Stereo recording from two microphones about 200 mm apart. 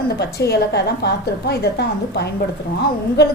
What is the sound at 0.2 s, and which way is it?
A woman's voice, 55° left (ahead or behind).